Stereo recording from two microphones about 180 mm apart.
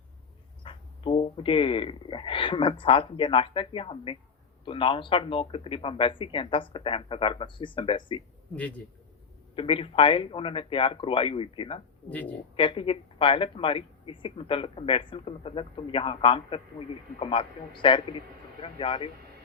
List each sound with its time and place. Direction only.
0.6 s speech: 30° left (ahead or behind)
8.5 s speech: 10° left (ahead or behind)
9.6 s speech: 30° left (ahead or behind)
12.0 s speech: 10° left (ahead or behind)
12.5 s speech: 30° left (ahead or behind)